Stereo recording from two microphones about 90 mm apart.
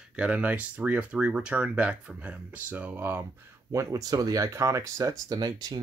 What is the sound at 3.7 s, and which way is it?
Speech, 45° right (ahead or behind).